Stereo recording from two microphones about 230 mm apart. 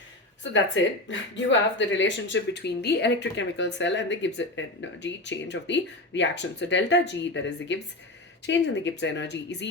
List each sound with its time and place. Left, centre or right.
0.5 s speech: left